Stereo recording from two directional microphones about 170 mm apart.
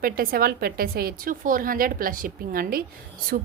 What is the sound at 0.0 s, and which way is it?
A woman's voice, 60° right (ahead or behind).